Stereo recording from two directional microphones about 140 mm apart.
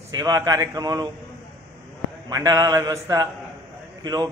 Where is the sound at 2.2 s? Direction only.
25° right (ahead or behind).